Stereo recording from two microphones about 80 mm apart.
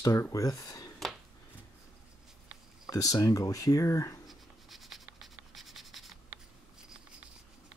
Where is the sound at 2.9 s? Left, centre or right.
Left.